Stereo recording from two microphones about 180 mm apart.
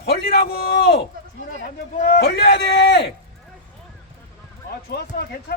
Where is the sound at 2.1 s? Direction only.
65° left (ahead or behind).